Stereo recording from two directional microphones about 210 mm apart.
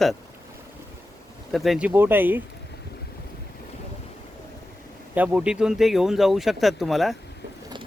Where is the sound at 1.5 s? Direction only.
Centre (ahead or behind).